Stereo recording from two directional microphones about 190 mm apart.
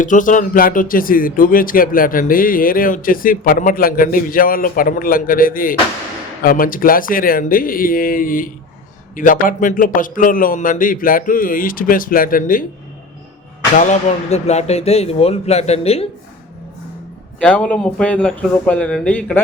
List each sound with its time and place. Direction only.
0.0 s speech: 45° left (ahead or behind)
13.7 s speech: 40° left (ahead or behind)
17.4 s a man's voice: 5° left (ahead or behind)